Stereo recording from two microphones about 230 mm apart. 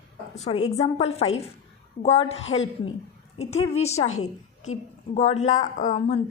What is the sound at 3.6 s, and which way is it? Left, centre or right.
Speech, left.